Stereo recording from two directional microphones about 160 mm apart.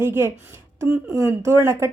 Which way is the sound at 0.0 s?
15° right (ahead or behind).